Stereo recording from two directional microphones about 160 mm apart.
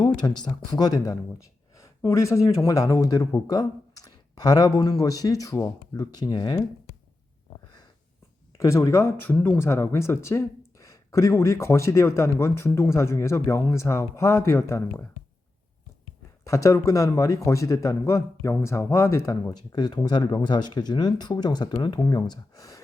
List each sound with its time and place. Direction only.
0.0 s speech: 25° left (ahead or behind)
8.5 s speech: 20° left (ahead or behind)
16.4 s speech: 20° left (ahead or behind)